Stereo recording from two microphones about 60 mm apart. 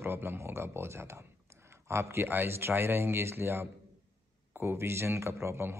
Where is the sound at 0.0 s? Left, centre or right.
Right.